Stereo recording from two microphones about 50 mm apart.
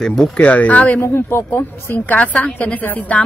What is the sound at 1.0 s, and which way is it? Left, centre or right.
Speech, left.